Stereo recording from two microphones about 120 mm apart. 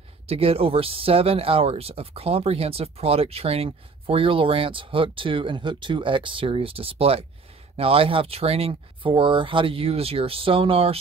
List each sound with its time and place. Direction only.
0.3 s speech: 55° right (ahead or behind)